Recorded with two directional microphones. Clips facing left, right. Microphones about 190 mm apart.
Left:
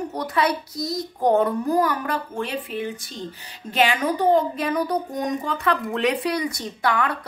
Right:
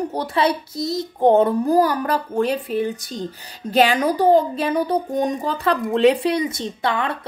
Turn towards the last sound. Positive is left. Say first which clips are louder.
# right 1 dB
turn(degrees=-25)  # may be behind; listen again after turning